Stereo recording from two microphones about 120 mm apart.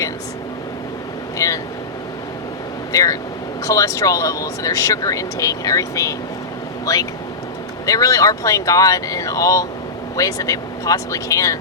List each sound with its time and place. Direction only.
1.4 s speech: 25° left (ahead or behind)
2.9 s speech: 30° left (ahead or behind)